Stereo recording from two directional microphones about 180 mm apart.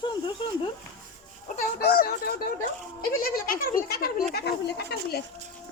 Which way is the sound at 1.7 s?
55° left (ahead or behind).